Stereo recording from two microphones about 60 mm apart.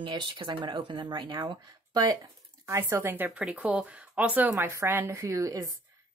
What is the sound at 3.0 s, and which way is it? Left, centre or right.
Speech, right.